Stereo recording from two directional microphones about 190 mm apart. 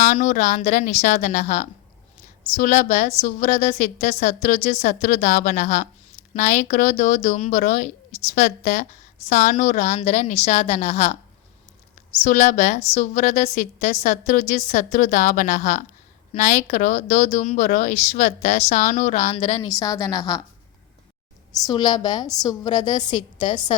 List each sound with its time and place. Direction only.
0.0 s a woman's voice: 40° left (ahead or behind)
12.2 s a woman's voice: 40° left (ahead or behind)
19.6 s a woman's voice: 20° left (ahead or behind)
21.5 s a woman's voice: 20° left (ahead or behind)